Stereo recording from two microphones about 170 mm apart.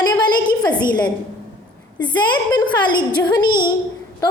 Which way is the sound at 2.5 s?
25° left (ahead or behind).